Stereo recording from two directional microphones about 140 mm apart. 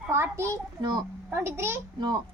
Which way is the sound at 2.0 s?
30° right (ahead or behind).